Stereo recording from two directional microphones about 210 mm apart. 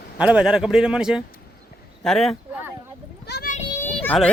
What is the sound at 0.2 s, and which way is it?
Speech, 5° right (ahead or behind).